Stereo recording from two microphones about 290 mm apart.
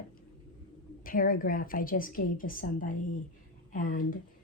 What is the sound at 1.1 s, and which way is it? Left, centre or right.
Speech, left.